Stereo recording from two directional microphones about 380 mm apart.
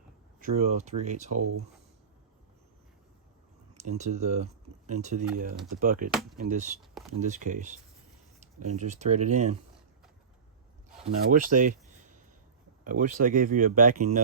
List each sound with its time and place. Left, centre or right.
0.3 s speech: right
1.4 s speech: right
3.8 s speech: centre
11.3 s speech: right